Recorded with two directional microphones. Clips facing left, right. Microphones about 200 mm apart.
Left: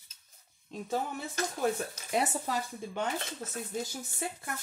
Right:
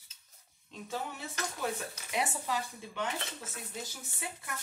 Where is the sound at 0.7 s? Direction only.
45° left (ahead or behind).